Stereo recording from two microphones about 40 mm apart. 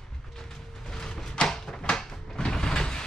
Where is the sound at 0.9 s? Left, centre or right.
Centre.